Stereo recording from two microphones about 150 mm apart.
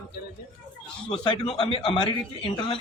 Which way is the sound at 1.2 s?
35° left (ahead or behind).